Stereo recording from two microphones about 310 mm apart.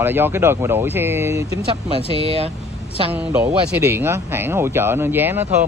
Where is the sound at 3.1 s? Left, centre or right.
Centre.